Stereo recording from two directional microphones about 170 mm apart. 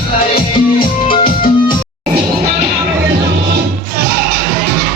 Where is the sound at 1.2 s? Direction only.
55° left (ahead or behind).